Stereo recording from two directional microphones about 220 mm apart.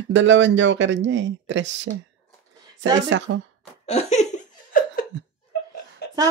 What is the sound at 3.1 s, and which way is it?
Speech, 55° right (ahead or behind).